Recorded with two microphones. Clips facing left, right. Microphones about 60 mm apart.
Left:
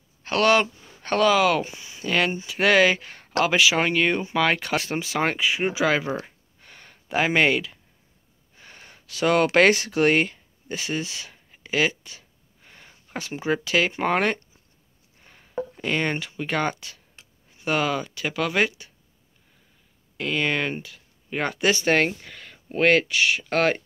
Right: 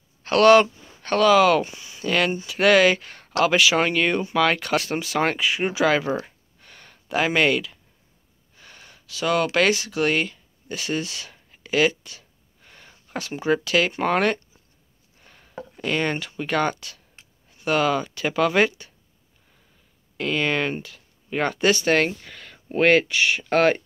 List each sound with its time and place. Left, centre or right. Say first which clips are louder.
0.2 s speech: right 5 dB; centre
6.2 s a sound: even; centre
8.5 s gasp: left 1 dB; left
9.0 s speech: left 2 dB; left
10.8 s speech: right 2 dB; centre
15.1 s a sound: right 1 dB; centre
15.8 s speech: right 2 dB; centre
20.2 s speech: right 2 dB; centre
21.7 s speech: right 1 dB; centre